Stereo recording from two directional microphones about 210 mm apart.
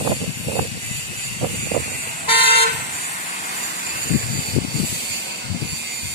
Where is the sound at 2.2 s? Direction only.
25° left (ahead or behind).